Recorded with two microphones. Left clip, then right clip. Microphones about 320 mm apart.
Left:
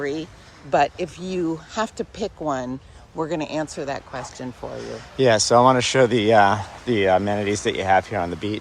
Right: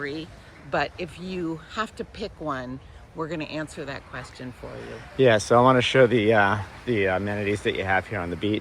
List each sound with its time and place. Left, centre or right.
0.0 s speech: left
5.1 s speech: centre